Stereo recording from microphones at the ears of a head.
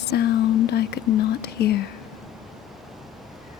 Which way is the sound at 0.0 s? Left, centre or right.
Left.